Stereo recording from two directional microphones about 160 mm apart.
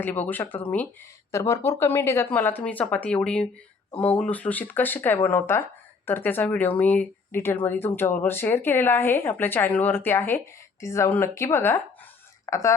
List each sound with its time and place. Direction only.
0.0 s speech: 10° left (ahead or behind)